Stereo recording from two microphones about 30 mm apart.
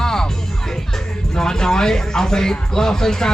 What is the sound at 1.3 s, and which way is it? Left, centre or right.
Speech, left.